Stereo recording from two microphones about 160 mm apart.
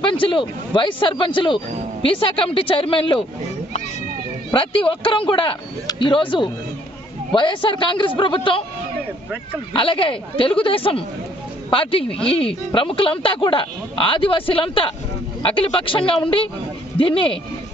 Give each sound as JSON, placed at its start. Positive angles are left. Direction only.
{"t": 0.0, "sound": "speech", "side_deg": 30}
{"t": 4.5, "sound": "speech", "side_deg": 35}
{"t": 9.8, "sound": "speech", "side_deg": 35}